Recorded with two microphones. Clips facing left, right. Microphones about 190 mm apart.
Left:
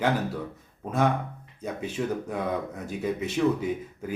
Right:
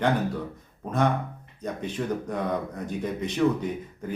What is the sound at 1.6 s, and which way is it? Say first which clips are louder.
Speech: even; 5° left (ahead or behind).